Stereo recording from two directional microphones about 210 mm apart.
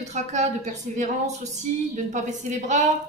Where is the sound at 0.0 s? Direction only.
35° right (ahead or behind).